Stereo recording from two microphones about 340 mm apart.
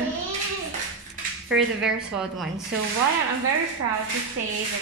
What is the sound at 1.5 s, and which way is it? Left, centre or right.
Speech, centre.